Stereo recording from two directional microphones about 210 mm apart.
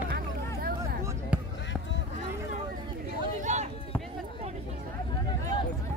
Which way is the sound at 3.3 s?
35° right (ahead or behind).